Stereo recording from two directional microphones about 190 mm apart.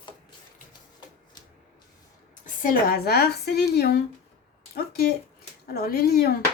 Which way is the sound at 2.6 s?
50° left (ahead or behind).